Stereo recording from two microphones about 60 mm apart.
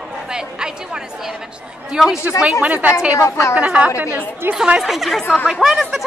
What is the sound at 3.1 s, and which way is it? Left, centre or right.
Speech, left.